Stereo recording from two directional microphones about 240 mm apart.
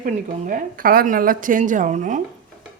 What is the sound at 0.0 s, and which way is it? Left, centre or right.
A woman's voice, right.